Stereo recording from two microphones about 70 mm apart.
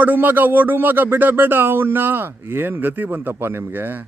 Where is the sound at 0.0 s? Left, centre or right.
Right.